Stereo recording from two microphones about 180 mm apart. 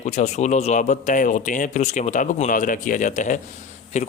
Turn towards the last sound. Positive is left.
turn(degrees=40)  # may be behind; listen again after turning